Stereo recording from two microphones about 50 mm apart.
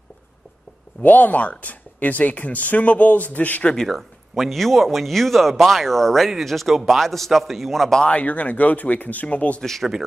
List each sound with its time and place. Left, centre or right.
1.0 s speech: left
3.7 s speech: centre
8.0 s speech: left
9.6 s speech: centre